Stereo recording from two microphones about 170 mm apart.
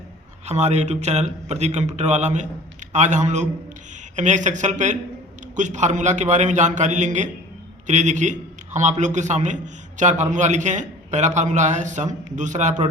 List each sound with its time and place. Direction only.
0.4 s a man's voice: 40° right (ahead or behind)